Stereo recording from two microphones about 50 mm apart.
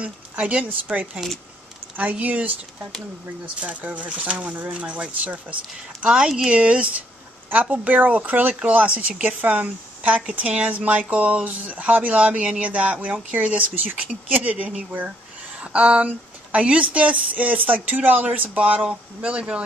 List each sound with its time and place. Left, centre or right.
0.0 s speech: right
0.9 s speech: centre
2.0 s speech: right
3.6 s speech: right
6.0 s speech: centre
6.6 s speech: right